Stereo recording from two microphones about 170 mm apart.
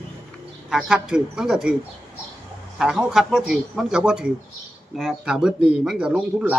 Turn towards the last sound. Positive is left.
turn(degrees=-5)  # may be behind; listen again after turning